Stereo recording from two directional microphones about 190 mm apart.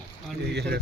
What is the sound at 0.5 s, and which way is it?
Speech, 60° right (ahead or behind).